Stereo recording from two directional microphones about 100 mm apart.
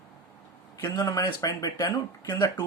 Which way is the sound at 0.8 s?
40° left (ahead or behind).